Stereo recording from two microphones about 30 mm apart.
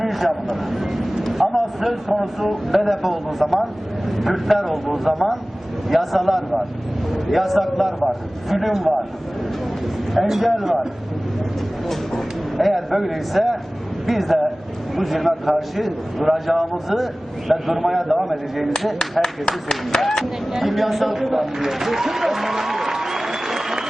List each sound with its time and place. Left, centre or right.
0.0 s vehicle: centre
0.7 s speech: centre
1.3 s a sound: centre
2.0 s a man's voice: centre
11.9 s a sound: centre
12.6 s a man's voice: centre
19.2 s speech: left
20.0 s speech: centre
20.5 s a man's voice: centre
21.2 s applause: centre